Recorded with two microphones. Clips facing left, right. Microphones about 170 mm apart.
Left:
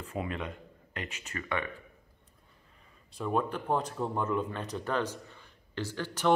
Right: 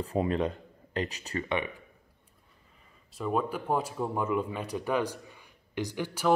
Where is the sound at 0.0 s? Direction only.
35° right (ahead or behind).